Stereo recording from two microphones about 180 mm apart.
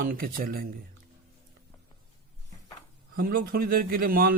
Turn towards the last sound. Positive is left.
turn(degrees=-55)  # may be behind; listen again after turning